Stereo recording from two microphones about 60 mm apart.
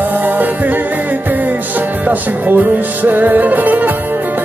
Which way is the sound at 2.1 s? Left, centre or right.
Right.